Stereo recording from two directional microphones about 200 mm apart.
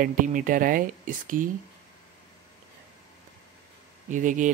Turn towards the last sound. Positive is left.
turn(degrees=-40)  # may be behind; listen again after turning